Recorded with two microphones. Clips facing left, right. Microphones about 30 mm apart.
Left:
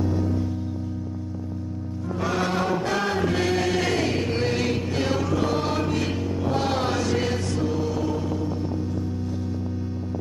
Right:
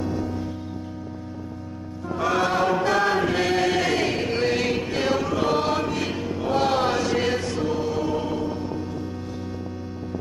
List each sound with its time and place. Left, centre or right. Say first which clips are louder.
0.0 s music: left 2 dB; centre
2.1 s music: right 3 dB; right
2.4 s chant: right 2 dB; centre
2.9 s choir: right 3 dB; centre
5.8 s music: even; centre
8.2 s music: right 1 dB; right